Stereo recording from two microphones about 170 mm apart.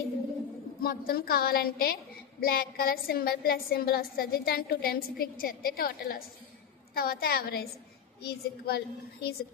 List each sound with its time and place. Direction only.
0.8 s a woman's voice: 60° left (ahead or behind)